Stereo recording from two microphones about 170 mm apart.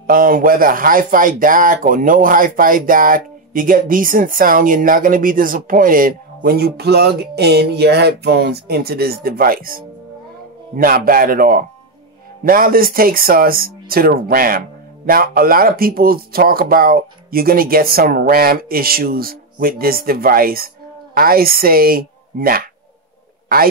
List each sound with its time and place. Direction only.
0.0 s speech: 55° right (ahead or behind)